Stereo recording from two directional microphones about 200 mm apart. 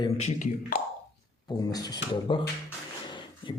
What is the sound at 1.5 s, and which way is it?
Speech, 20° left (ahead or behind).